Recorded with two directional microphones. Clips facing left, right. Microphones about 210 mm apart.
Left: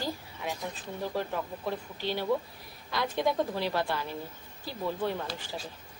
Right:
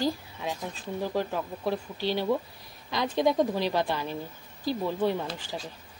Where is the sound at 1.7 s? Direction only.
15° right (ahead or behind).